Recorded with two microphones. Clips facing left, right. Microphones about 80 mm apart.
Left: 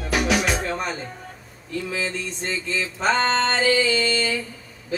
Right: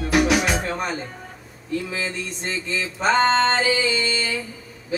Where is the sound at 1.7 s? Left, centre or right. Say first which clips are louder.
Right 1 dB; centre.